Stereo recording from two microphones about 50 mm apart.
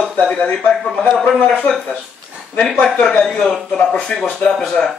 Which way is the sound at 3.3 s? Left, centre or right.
Centre.